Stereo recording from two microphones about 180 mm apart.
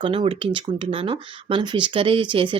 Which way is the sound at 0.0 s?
30° right (ahead or behind).